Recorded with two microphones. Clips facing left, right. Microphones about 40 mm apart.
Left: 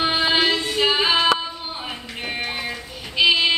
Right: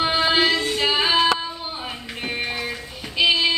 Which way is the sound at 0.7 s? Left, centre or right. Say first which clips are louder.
Left 1 dB; centre.